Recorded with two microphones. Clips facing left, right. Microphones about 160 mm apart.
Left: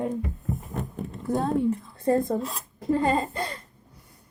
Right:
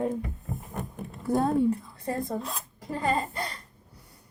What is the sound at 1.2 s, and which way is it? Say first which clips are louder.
Speech: right 1 dB; 10° right (ahead or behind).